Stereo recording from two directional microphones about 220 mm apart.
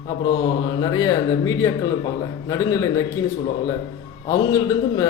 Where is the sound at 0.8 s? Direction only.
15° left (ahead or behind).